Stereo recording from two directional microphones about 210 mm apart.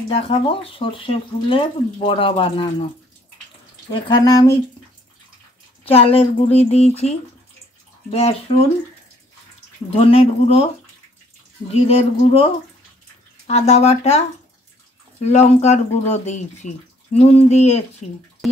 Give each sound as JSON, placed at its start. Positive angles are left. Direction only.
{"t": 0.1, "sound": "speech", "side_deg": 25}
{"t": 3.9, "sound": "speech", "side_deg": 20}
{"t": 5.9, "sound": "speech", "side_deg": 30}
{"t": 9.8, "sound": "speech", "side_deg": 25}
{"t": 11.9, "sound": "speech", "side_deg": 25}
{"t": 13.5, "sound": "speech", "side_deg": 30}
{"t": 15.2, "sound": "speech", "side_deg": 30}
{"t": 18.4, "sound": "a sound", "side_deg": 0}